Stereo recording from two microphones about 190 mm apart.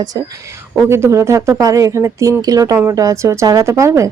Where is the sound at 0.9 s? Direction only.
15° right (ahead or behind).